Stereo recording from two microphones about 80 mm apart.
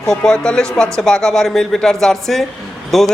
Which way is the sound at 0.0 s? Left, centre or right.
Centre.